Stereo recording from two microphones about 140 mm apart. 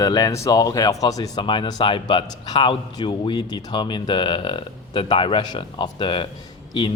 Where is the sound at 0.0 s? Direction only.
25° left (ahead or behind).